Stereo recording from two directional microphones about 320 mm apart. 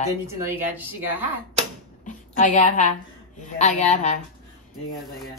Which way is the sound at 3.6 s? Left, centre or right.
Left.